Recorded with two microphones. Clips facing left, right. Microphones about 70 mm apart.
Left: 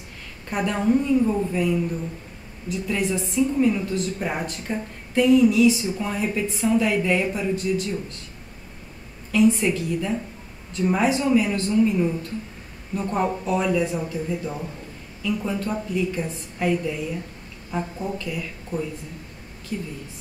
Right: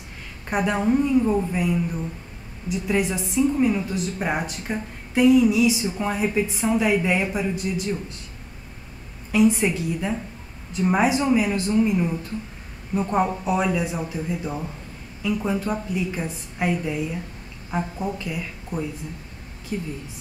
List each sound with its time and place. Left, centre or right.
0.5 s a woman's voice: centre
2.9 s a woman's voice: centre
9.3 s a woman's voice: centre